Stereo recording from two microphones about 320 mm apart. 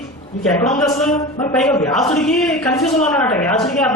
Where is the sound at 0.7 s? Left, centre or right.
Centre.